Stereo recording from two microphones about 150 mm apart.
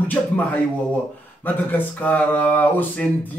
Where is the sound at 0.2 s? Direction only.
10° left (ahead or behind).